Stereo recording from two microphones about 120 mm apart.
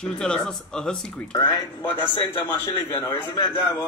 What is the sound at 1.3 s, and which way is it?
A man's voice, 35° left (ahead or behind).